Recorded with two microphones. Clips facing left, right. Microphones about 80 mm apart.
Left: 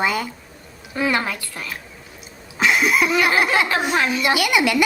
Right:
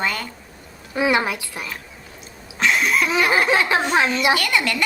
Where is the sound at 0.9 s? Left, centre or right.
Centre.